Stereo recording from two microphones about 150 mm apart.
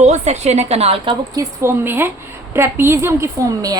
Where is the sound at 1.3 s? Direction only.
20° right (ahead or behind).